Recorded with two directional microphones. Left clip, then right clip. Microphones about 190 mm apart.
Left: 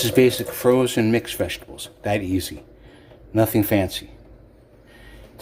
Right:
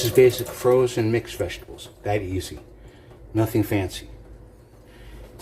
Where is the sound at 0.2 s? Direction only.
50° left (ahead or behind).